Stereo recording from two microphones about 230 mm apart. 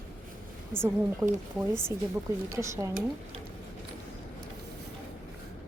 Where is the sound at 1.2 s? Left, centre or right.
Centre.